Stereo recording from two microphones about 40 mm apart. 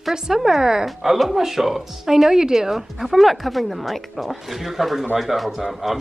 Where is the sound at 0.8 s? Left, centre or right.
Centre.